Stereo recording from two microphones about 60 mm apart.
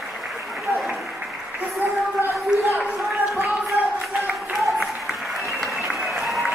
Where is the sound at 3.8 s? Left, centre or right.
Right.